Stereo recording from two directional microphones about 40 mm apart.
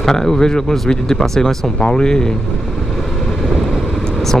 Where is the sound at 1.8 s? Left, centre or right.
Left.